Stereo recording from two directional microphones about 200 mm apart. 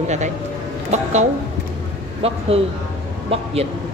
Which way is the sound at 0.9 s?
35° right (ahead or behind).